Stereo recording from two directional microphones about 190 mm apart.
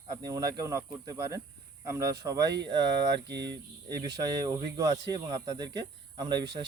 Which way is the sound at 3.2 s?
65° right (ahead or behind).